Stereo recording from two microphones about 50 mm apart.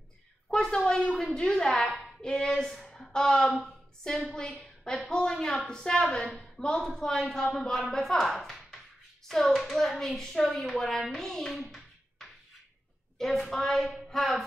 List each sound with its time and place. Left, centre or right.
0.5 s a sound: centre
1.2 s speech: centre
2.9 s a sound: centre
4.3 s a woman's voice: centre
11.5 s hands: centre
13.2 s speech: centre